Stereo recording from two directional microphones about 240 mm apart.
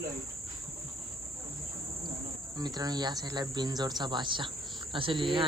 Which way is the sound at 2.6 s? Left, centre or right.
Centre.